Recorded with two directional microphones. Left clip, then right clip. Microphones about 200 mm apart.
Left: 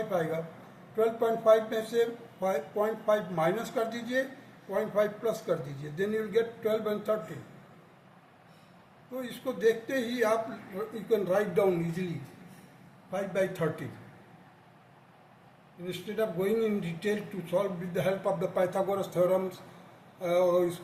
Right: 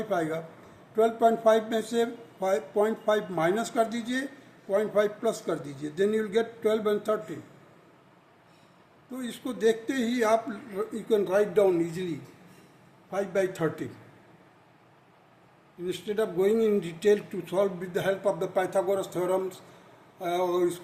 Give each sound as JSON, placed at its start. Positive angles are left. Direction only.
{"t": 0.1, "sound": "a man's voice", "side_deg": -60}
{"t": 9.2, "sound": "a man's voice", "side_deg": -60}
{"t": 13.1, "sound": "a man's voice", "side_deg": -55}
{"t": 15.9, "sound": "a man's voice", "side_deg": -55}